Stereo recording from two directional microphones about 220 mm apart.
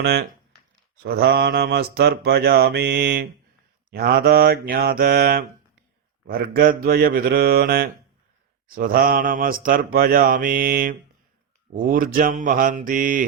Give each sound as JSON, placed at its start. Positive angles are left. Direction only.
{"t": 0.0, "sound": "mantra", "side_deg": -45}